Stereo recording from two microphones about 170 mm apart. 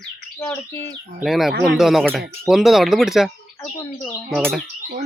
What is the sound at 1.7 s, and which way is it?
Speech, centre (ahead or behind).